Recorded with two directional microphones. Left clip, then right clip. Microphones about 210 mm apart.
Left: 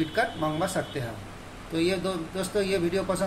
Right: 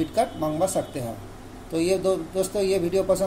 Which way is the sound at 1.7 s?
40° right (ahead or behind).